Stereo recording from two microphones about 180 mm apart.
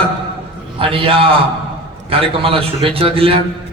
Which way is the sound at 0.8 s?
30° right (ahead or behind).